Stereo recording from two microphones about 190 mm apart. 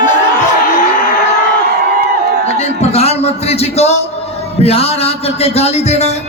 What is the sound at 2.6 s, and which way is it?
A man's voice, 35° left (ahead or behind).